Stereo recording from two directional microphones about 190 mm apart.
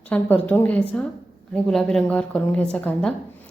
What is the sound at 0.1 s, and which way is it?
A woman's voice, 10° left (ahead or behind).